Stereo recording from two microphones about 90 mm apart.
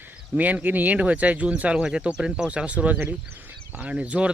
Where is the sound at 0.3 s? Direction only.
15° right (ahead or behind).